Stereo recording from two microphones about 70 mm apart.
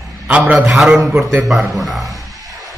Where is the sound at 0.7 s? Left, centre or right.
Centre.